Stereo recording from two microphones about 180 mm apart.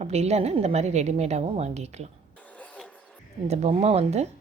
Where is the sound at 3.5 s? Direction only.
35° right (ahead or behind).